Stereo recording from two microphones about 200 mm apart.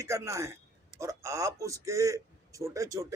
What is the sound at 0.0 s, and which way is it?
A man's voice, 15° right (ahead or behind).